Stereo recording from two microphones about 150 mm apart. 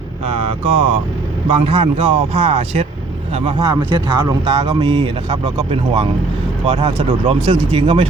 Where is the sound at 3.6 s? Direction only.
20° right (ahead or behind).